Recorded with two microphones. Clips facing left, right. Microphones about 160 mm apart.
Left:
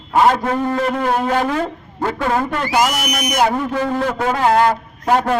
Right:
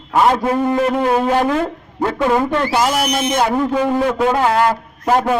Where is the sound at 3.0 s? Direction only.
25° right (ahead or behind).